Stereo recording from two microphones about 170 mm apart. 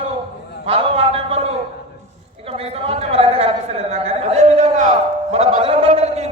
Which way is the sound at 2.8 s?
35° right (ahead or behind).